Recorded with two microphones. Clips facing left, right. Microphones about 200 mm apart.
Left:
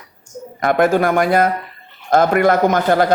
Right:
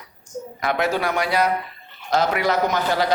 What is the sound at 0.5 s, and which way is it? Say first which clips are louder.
Speech: left 8 dB; 50° left (ahead or behind).